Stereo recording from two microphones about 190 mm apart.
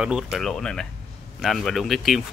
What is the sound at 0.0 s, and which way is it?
Speech, centre (ahead or behind).